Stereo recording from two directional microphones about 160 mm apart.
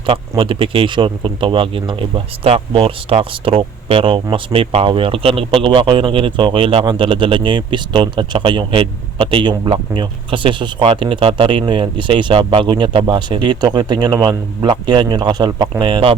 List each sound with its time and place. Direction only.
0.0 s speech: 35° right (ahead or behind)